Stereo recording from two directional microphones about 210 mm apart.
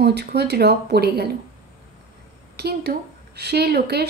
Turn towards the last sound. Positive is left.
turn(degrees=-50)  # may be behind; listen again after turning